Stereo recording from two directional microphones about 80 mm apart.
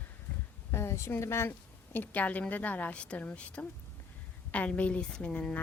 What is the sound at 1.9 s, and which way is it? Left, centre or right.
A woman's voice, centre.